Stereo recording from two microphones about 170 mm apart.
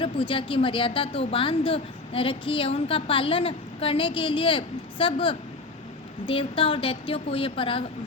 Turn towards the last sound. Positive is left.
turn(degrees=30)  # may be behind; listen again after turning